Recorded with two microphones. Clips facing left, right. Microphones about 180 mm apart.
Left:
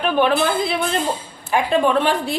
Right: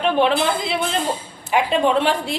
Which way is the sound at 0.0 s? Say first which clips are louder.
Even; 20° right (ahead or behind).